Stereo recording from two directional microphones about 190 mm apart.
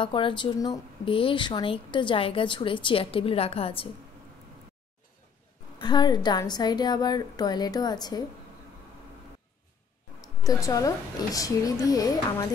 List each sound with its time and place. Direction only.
0.0 s speech: 25° left (ahead or behind)
5.8 s speech: 20° left (ahead or behind)
10.2 s speech: 20° left (ahead or behind)